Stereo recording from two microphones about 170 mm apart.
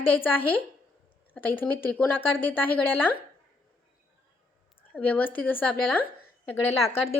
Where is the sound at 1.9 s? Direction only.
10° left (ahead or behind).